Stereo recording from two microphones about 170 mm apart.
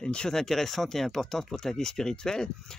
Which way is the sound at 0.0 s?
5° left (ahead or behind).